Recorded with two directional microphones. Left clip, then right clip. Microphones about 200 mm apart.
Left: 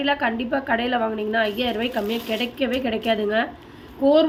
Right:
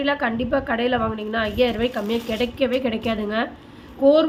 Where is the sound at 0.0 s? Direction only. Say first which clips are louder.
Even; 10° right (ahead or behind).